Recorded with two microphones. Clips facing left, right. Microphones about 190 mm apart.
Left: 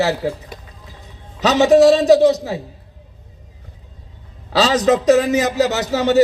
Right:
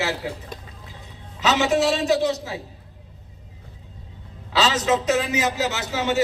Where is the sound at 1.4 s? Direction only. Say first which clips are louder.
Left 9 dB; 40° left (ahead or behind).